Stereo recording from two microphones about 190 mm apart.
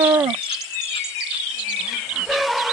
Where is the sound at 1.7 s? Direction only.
5° right (ahead or behind).